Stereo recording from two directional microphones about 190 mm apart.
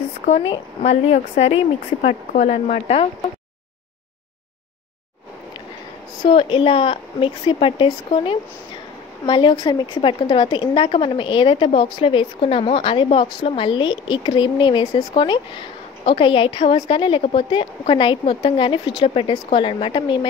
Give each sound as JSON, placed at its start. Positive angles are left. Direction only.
{"t": 0.8, "sound": "speech", "side_deg": 35}
{"t": 6.2, "sound": "a woman's voice", "side_deg": 30}